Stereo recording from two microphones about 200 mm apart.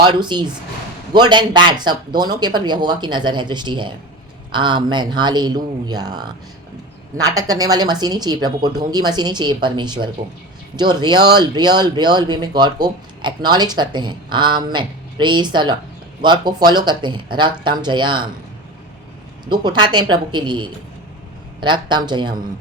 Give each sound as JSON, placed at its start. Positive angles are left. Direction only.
{"t": 0.0, "sound": "speech", "side_deg": -20}
{"t": 19.5, "sound": "speech", "side_deg": -20}